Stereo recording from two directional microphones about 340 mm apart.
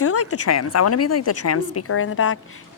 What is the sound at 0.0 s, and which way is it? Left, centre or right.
A woman's voice, left.